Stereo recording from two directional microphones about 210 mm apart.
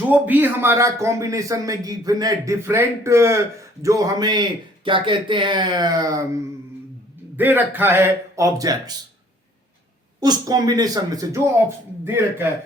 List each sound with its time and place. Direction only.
0.1 s a man's voice: 10° right (ahead or behind)
10.2 s a man's voice: 15° right (ahead or behind)